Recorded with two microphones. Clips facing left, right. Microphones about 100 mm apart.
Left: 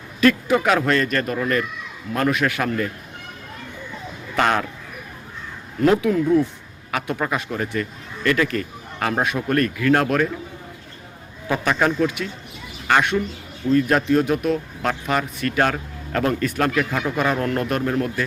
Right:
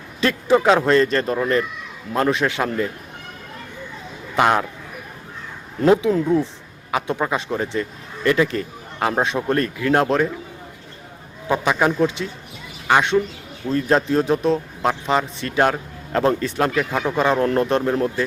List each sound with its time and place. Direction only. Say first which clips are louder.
0.2 s speech: even; 25° right (ahead or behind)
4.4 s speech: right 2 dB; 15° right (ahead or behind)
5.8 s speech: right 1 dB; 25° right (ahead or behind)
11.4 s speech: right 2 dB; 20° right (ahead or behind)